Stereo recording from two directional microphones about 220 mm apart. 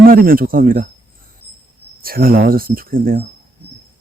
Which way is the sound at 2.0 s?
40° right (ahead or behind).